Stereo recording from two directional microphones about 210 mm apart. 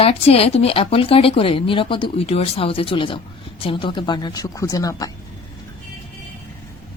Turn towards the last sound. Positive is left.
turn(degrees=15)  # may be behind; listen again after turning